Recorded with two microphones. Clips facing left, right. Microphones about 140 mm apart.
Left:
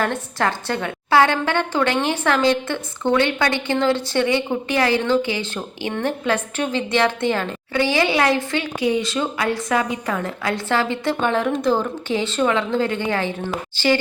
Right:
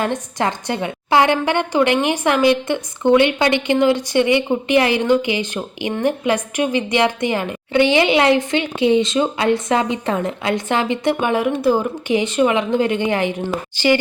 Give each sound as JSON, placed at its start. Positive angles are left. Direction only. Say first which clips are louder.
{"t": 0.0, "sound": "a woman's voice", "louder": "right 1 dB", "side_deg": -15}